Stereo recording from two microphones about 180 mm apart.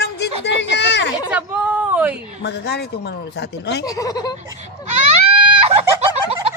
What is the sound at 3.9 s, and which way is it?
Speech, 20° left (ahead or behind).